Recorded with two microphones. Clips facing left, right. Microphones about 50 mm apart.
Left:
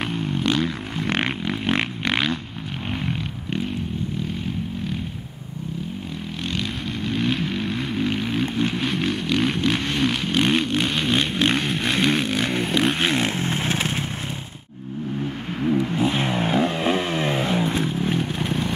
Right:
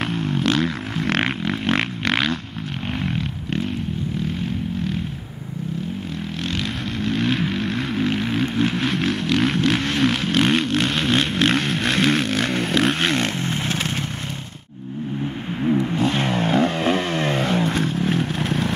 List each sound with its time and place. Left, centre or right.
0.0 s a sound: centre
7.0 s vehicle: centre
13.4 s motorcycle: left
16.0 s vehicle: centre